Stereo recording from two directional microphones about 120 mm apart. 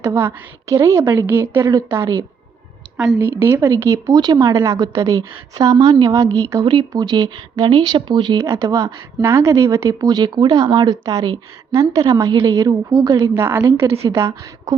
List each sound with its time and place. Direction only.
0.0 s a woman's voice: 20° right (ahead or behind)
13.3 s a woman's voice: 20° right (ahead or behind)